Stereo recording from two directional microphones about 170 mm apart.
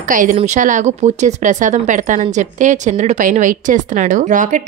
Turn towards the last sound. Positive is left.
turn(degrees=-50)  # may be behind; listen again after turning